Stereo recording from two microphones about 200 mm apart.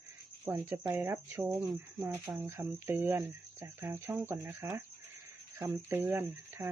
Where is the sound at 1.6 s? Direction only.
20° right (ahead or behind).